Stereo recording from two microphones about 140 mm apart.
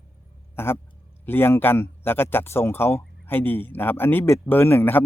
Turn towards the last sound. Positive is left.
turn(degrees=15)  # may be behind; listen again after turning